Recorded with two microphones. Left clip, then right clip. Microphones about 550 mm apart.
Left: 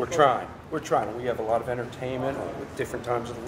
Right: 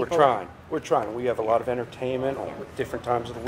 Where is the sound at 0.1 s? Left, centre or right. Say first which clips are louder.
Right 1 dB; right.